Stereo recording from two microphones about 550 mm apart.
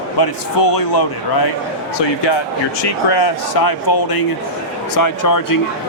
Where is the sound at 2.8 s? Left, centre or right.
Left.